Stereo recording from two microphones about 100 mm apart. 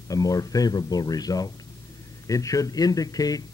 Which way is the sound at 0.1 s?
35° left (ahead or behind).